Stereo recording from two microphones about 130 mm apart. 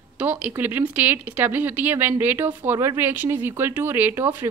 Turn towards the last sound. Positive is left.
turn(degrees=-15)  # may be behind; listen again after turning